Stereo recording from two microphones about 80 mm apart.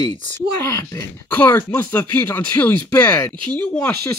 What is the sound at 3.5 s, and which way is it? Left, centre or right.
Speech, centre.